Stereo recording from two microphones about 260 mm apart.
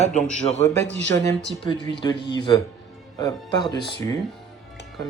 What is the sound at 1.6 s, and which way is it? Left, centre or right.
Speech, centre.